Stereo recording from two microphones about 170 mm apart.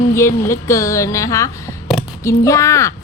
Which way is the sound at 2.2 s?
20° left (ahead or behind).